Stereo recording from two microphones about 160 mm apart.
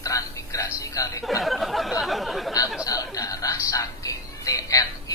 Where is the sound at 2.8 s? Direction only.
20° left (ahead or behind).